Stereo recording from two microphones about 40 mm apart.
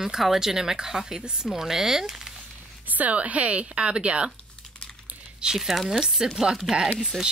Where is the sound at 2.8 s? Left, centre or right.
Right.